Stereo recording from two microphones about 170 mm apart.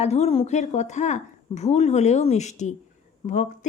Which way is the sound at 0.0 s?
40° left (ahead or behind).